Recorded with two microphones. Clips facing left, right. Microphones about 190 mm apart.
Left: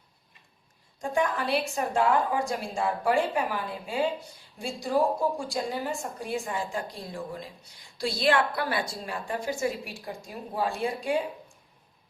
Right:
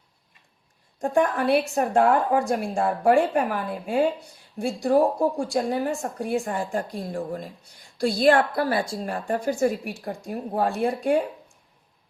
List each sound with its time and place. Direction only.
0.9 s a woman's voice: 55° right (ahead or behind)
6.4 s a woman's voice: 50° right (ahead or behind)
9.0 s a woman's voice: 50° right (ahead or behind)